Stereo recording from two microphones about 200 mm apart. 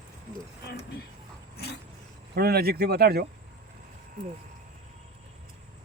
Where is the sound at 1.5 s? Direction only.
55° left (ahead or behind).